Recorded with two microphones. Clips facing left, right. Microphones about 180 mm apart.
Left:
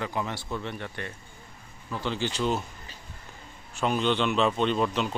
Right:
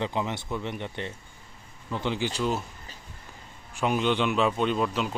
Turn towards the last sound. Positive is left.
turn(degrees=-5)  # may be behind; listen again after turning